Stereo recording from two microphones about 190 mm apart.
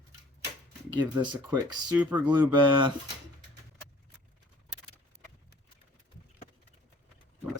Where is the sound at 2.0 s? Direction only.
5° right (ahead or behind).